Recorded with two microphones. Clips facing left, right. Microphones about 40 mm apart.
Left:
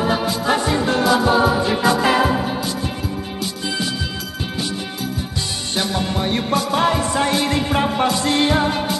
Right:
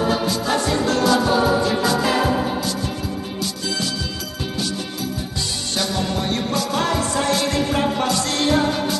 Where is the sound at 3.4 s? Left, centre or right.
Left.